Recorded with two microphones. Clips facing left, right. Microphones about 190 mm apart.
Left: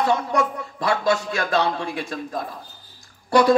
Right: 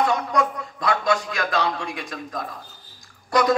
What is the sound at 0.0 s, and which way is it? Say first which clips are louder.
A man's voice: left 1 dB; 30° left (ahead or behind).